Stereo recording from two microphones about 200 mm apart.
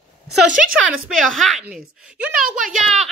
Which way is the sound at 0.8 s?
Centre (ahead or behind).